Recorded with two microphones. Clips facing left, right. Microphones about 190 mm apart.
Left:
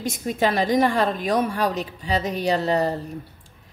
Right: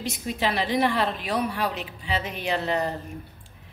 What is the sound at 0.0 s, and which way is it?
A woman's voice, 45° left (ahead or behind).